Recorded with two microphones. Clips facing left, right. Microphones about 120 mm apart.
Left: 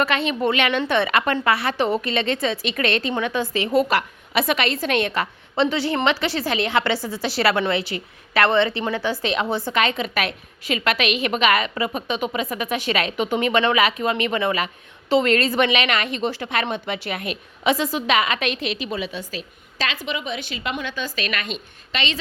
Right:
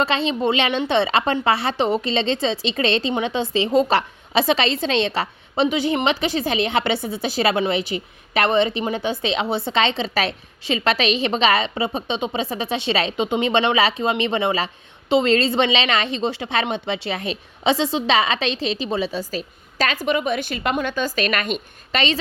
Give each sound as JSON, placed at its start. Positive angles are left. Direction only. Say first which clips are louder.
{"t": 0.0, "sound": "a woman's voice", "louder": "right 1 dB", "side_deg": -25}